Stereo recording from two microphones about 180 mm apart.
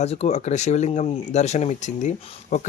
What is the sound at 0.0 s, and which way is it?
Speech, 35° left (ahead or behind).